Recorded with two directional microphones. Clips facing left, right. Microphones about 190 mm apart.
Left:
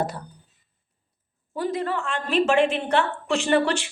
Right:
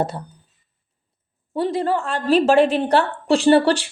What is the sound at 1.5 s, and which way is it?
A woman's voice, 30° right (ahead or behind).